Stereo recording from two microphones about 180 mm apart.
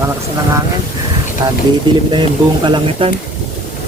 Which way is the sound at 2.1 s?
25° right (ahead or behind).